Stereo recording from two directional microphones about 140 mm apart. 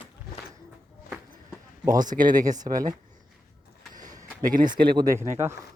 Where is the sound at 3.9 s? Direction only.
70° right (ahead or behind).